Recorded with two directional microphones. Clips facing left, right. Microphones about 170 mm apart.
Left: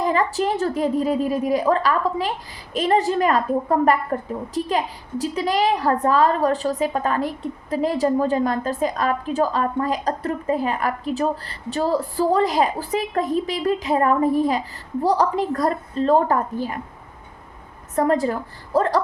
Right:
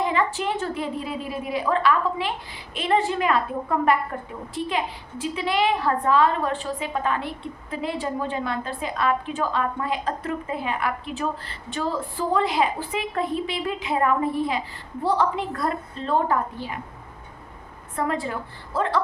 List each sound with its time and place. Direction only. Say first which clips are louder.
0.0 s a woman's voice: left 3 dB; 40° left (ahead or behind)
17.9 s a woman's voice: left 7 dB; 40° left (ahead or behind)